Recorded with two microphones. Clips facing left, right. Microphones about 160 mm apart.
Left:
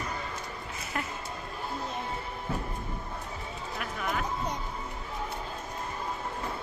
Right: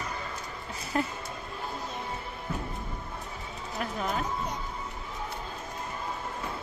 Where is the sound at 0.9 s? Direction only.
30° right (ahead or behind).